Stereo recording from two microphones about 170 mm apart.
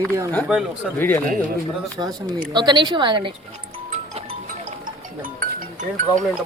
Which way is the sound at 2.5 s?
25° right (ahead or behind).